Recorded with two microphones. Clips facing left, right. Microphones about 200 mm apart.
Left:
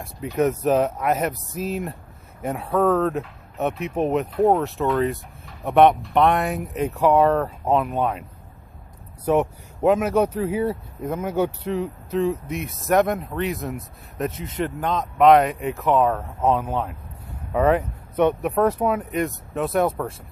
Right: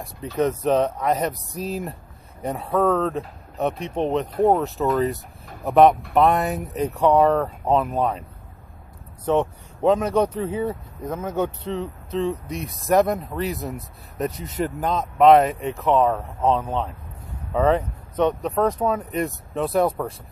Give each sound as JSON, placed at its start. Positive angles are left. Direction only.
{"t": 0.0, "sound": "speech", "side_deg": 10}
{"t": 14.4, "sound": "speech", "side_deg": -45}
{"t": 14.8, "sound": "speech", "side_deg": -5}